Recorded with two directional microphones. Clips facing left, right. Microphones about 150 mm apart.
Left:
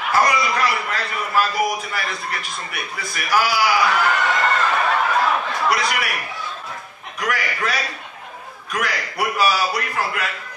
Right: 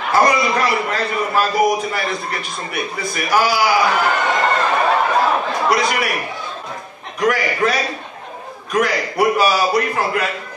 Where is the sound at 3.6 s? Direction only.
25° right (ahead or behind).